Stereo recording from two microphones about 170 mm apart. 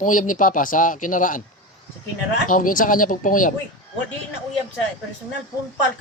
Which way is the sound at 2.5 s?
50° left (ahead or behind).